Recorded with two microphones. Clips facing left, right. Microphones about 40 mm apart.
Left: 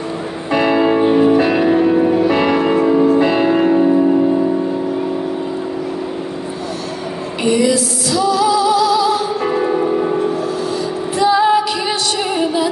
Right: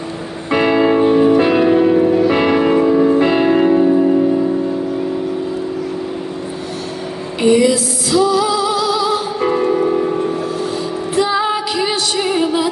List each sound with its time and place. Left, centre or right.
0.5 s music: centre
0.7 s music: centre
1.0 s music: centre
2.3 s music: centre
3.0 s music: centre
3.6 s music: centre
7.6 s music: right
11.1 s music: right